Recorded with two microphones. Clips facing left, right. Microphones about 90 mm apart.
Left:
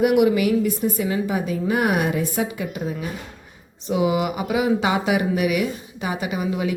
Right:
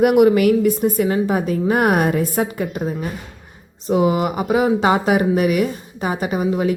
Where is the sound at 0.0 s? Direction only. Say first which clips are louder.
Right 4 dB; 50° right (ahead or behind).